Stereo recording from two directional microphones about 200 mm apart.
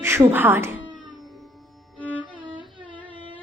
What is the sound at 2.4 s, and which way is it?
Music, 25° right (ahead or behind).